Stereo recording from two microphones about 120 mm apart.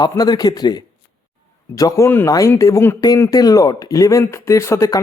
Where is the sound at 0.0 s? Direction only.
35° left (ahead or behind).